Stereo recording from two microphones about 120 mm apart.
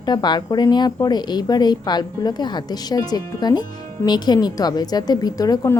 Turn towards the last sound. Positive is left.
turn(degrees=30)  # may be behind; listen again after turning